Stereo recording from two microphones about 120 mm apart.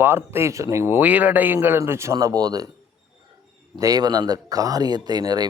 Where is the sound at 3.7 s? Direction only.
35° right (ahead or behind).